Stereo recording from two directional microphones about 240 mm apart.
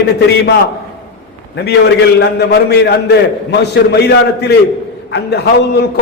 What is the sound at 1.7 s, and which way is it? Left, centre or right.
A man's voice, left.